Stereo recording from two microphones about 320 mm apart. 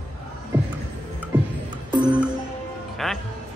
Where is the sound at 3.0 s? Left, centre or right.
Centre.